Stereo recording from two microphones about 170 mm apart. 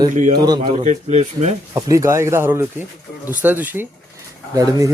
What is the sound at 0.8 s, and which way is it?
Speech, 40° right (ahead or behind).